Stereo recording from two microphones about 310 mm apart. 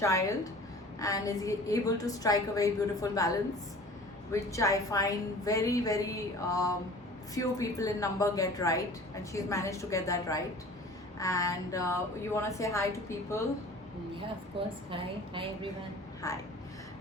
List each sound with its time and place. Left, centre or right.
0.0 s a woman's voice: centre
14.8 s a woman's voice: centre